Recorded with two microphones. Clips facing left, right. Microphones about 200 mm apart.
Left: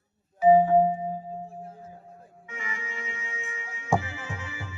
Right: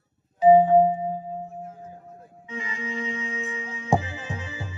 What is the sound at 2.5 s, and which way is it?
Music, 20° right (ahead or behind).